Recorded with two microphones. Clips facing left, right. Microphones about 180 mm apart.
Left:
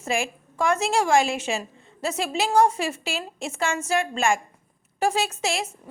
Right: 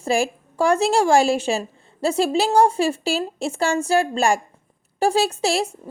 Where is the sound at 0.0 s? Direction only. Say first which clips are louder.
Right 6 dB; 35° right (ahead or behind).